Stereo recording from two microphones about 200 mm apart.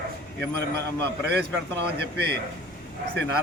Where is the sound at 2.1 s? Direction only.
55° right (ahead or behind).